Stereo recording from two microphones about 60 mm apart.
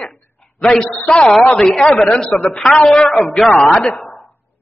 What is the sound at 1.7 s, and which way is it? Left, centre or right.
A man's voice, centre.